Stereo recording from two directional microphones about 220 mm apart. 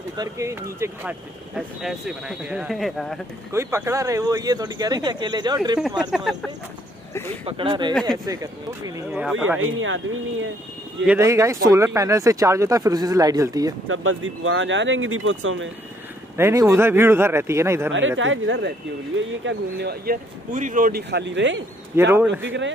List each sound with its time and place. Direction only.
0.2 s speech: 15° right (ahead or behind)
3.5 s speech: 10° right (ahead or behind)
6.1 s speech: centre (ahead or behind)
7.2 s speech: 25° right (ahead or behind)
9.1 s speech: 5° right (ahead or behind)
9.6 s speech: 65° right (ahead or behind)
11.1 s speech: 10° right (ahead or behind)
13.8 s speech: 65° right (ahead or behind)
16.3 s speech: 10° right (ahead or behind)
17.9 s speech: 60° right (ahead or behind)
19.4 s speech: 45° right (ahead or behind)
21.9 s speech: 10° right (ahead or behind)
22.4 s speech: 55° right (ahead or behind)